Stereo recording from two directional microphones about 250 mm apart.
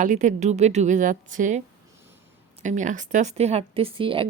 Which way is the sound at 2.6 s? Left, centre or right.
Right.